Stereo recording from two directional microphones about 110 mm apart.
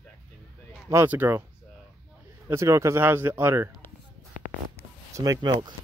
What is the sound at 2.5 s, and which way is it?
Speech, 25° right (ahead or behind).